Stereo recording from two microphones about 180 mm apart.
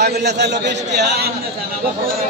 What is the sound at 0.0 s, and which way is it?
A man's voice, 70° right (ahead or behind).